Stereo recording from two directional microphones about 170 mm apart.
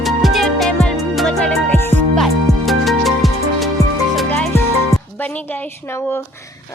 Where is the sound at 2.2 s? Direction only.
Centre (ahead or behind).